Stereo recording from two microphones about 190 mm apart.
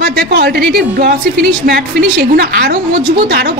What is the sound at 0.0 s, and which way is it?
A woman's voice, 60° right (ahead or behind).